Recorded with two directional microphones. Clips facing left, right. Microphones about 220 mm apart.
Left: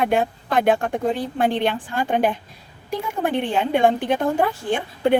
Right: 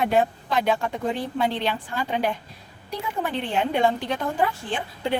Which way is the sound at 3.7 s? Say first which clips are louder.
Left 7 dB; 55° left (ahead or behind).